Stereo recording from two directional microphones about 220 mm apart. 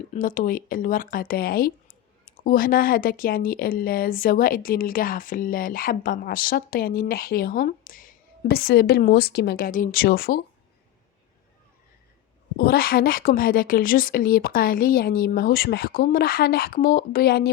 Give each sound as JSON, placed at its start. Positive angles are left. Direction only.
{"t": 0.1, "sound": "speech", "side_deg": 40}
{"t": 12.5, "sound": "speech", "side_deg": 45}